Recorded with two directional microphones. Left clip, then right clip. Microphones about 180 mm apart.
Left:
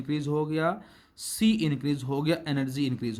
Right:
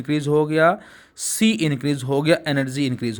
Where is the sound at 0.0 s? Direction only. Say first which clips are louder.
Right 10 dB; 30° right (ahead or behind).